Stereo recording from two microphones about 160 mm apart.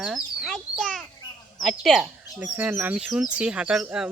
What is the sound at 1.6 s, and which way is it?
Speech, centre (ahead or behind).